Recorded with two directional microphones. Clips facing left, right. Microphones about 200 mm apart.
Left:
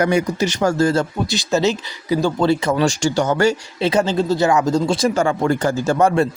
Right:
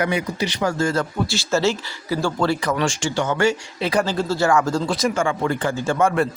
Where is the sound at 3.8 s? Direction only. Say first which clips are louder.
Left 4 dB; 20° left (ahead or behind); by 6.1 s 40° left (ahead or behind).